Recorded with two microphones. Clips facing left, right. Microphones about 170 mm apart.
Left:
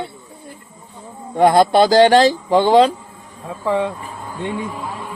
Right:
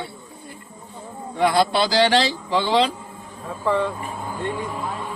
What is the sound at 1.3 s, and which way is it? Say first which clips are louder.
Speech: left 7 dB; 45° left (ahead or behind).